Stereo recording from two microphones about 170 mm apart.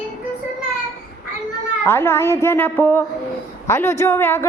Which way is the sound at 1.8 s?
15° left (ahead or behind).